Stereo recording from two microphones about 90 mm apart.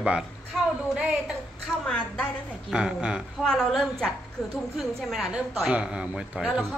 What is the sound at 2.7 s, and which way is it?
Speech, 10° right (ahead or behind).